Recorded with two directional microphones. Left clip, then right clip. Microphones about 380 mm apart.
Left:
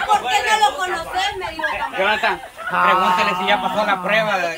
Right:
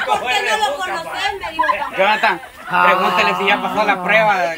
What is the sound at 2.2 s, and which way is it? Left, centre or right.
Speech, right.